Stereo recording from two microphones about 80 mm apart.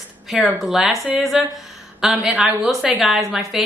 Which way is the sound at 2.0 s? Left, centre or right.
Centre.